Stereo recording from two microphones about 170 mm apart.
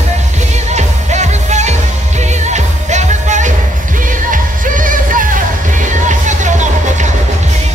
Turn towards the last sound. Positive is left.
turn(degrees=-45)  # may be behind; listen again after turning